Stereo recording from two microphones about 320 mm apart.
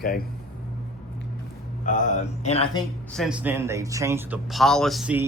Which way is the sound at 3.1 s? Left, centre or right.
Centre.